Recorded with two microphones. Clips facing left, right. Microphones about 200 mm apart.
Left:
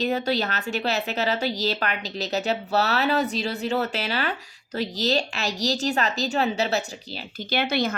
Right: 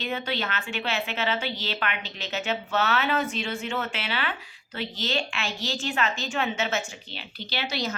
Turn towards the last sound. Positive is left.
turn(degrees=55)  # may be behind; listen again after turning